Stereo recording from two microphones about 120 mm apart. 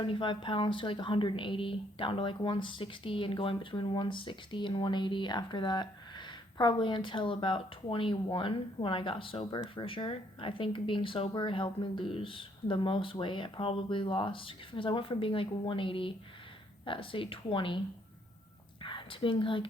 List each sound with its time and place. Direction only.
0.0 s a woman's voice: 45° left (ahead or behind)